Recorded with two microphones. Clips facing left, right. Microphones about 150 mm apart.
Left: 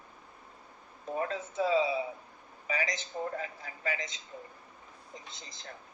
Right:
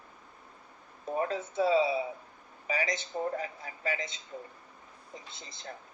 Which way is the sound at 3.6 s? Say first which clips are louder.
Right 2 dB; 25° right (ahead or behind).